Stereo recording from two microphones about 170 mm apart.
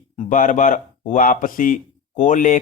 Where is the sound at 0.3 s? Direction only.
50° left (ahead or behind).